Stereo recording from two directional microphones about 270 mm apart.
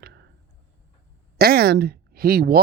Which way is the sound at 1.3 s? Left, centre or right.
Right.